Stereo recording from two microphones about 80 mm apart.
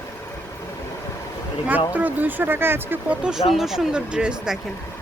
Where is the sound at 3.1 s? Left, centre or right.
Centre.